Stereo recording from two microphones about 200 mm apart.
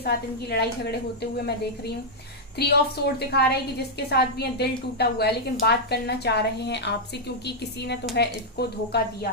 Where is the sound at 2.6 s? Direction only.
55° left (ahead or behind).